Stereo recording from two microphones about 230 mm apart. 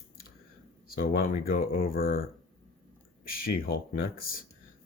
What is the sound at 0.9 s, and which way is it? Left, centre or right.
Speech, left.